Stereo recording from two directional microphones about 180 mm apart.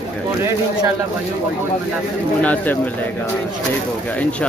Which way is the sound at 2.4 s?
10° left (ahead or behind).